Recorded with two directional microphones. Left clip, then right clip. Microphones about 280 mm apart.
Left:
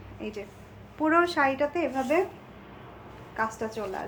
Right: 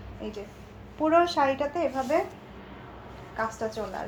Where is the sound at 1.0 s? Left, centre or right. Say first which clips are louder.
Right 1 dB; centre.